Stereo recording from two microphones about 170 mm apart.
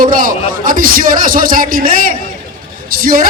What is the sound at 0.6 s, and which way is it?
A man's voice, 55° right (ahead or behind).